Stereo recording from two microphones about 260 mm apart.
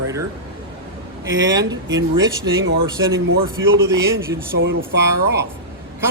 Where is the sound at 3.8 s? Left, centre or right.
Centre.